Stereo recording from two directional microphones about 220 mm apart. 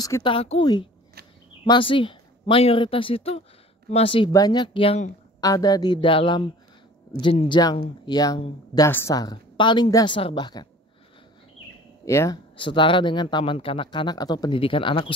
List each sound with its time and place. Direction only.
0.0 s speech: 20° left (ahead or behind)
5.4 s speech: 15° left (ahead or behind)
12.0 s speech: 15° left (ahead or behind)